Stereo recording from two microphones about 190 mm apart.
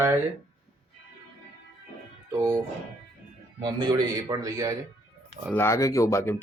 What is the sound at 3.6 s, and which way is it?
Speech, 20° right (ahead or behind).